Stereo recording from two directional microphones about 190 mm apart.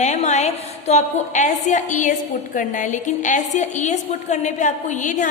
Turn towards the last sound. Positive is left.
turn(degrees=40)  # may be behind; listen again after turning